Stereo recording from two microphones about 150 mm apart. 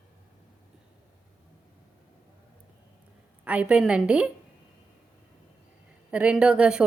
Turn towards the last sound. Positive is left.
turn(degrees=-5)  # may be behind; listen again after turning